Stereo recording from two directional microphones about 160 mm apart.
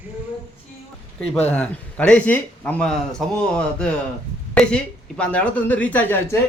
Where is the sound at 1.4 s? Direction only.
5° left (ahead or behind).